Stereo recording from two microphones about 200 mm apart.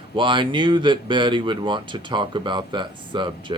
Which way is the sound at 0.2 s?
25° right (ahead or behind).